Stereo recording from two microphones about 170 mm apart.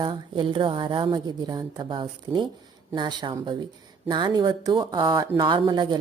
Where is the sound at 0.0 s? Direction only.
30° right (ahead or behind).